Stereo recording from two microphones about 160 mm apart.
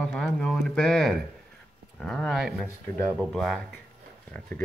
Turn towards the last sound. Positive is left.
turn(degrees=0)  # may be behind; listen again after turning